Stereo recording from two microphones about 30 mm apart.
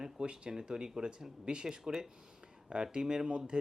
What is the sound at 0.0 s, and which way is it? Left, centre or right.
Speech, right.